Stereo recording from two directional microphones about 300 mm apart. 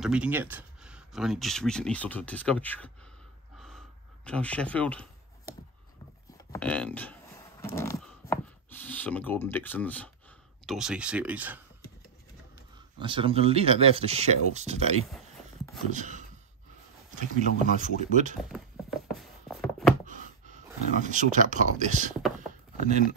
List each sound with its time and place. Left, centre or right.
0.0 s speech: centre
3.5 s a sound: centre
6.5 s speech: centre
7.6 s a sound: centre
10.7 s speech: centre
13.0 s speech: centre
17.7 s speech: right
18.4 s a sound: centre
20.1 s speech: right
22.5 s chopping: right